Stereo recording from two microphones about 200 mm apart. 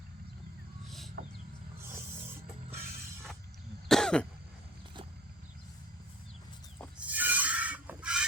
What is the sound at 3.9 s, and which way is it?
Cough, 5° left (ahead or behind).